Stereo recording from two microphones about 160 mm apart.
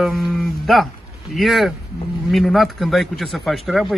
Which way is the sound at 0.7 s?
Centre (ahead or behind).